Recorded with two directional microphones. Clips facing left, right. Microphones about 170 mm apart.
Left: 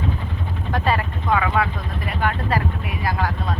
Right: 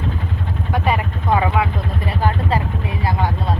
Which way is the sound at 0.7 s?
15° right (ahead or behind).